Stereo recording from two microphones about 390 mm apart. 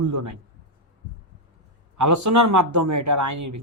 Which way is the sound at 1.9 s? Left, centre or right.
Right.